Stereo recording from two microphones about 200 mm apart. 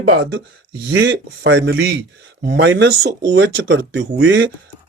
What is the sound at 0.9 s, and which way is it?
Speech, 60° right (ahead or behind).